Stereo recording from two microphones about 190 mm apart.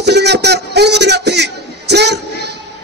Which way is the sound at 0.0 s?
60° right (ahead or behind).